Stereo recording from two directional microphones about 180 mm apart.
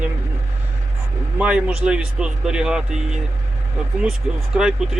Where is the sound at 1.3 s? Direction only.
5° right (ahead or behind).